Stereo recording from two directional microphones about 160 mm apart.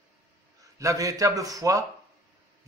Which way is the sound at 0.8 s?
20° right (ahead or behind).